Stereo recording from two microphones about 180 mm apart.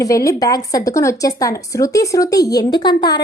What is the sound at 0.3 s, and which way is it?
Speech, 20° left (ahead or behind).